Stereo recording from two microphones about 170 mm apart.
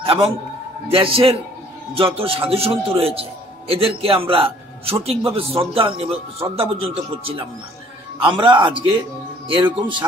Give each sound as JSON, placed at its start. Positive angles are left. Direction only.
{"t": 0.0, "sound": "a man's voice", "side_deg": -30}